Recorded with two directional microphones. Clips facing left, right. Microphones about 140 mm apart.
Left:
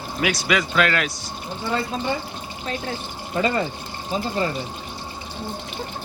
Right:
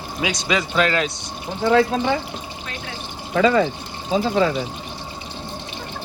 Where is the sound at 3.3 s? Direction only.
90° right.